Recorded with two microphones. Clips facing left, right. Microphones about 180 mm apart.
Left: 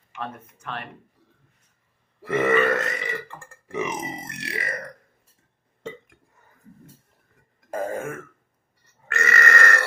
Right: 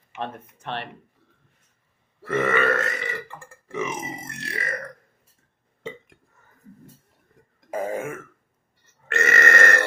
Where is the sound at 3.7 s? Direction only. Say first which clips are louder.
Left 1 dB; 15° left (ahead or behind).